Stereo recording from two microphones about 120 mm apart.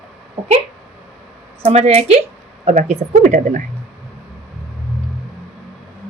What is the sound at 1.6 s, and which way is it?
Speech, 65° right (ahead or behind).